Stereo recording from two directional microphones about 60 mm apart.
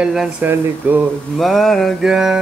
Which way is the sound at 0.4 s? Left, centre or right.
Right.